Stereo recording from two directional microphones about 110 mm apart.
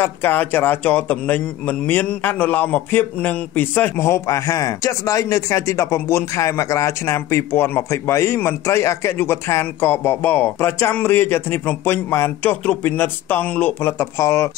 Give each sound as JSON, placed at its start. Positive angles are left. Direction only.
{"t": 0.0, "sound": "a man's voice", "side_deg": 20}